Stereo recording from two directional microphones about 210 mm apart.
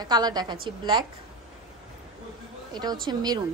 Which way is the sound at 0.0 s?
20° right (ahead or behind).